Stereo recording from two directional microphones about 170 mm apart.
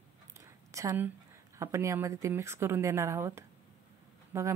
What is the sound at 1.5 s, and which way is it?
A woman's voice, 15° right (ahead or behind).